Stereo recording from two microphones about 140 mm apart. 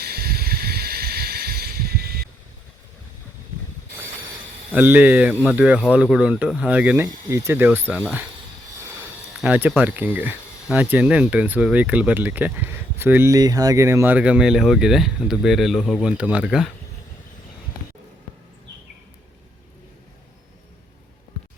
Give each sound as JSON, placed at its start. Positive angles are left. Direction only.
{"t": 0.0, "sound": "a sound", "side_deg": -90}
{"t": 4.7, "sound": "speech", "side_deg": -10}
{"t": 9.4, "sound": "speech", "side_deg": -10}
{"t": 13.3, "sound": "speech", "side_deg": -25}